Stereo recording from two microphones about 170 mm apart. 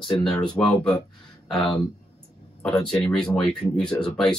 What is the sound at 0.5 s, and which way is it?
Speech, 5° left (ahead or behind).